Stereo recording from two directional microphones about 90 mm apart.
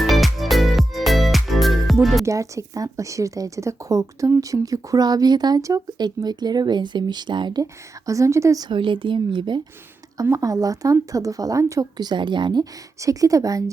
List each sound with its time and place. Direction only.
0.0 s music: centre (ahead or behind)
2.2 s a woman's voice: 35° right (ahead or behind); by 7.6 s 60° right (ahead or behind)
7.6 s a woman's voice: 40° right (ahead or behind)
8.6 s speech: 65° right (ahead or behind)
10.2 s a woman's voice: 40° right (ahead or behind); by 12.6 s 60° right (ahead or behind)
13.0 s a woman's voice: 40° right (ahead or behind)